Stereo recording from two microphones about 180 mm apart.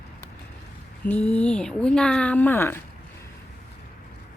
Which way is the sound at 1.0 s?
5° left (ahead or behind).